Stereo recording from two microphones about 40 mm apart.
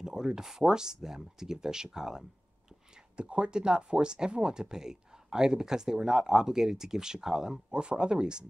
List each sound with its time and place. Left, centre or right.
0.0 s speech: centre
3.2 s speech: right
7.7 s speech: right